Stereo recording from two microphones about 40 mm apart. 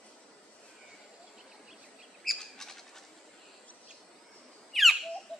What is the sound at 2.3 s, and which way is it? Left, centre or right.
Bird, centre.